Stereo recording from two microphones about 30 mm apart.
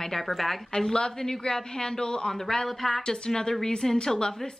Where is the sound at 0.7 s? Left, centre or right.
Left.